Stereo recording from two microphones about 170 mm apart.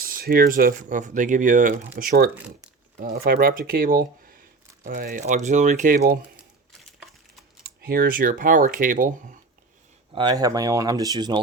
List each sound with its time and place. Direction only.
0.0 s speech: 60° right (ahead or behind)
2.0 s speech: 60° right (ahead or behind)
7.6 s speech: 60° right (ahead or behind)
10.2 s speech: 25° right (ahead or behind)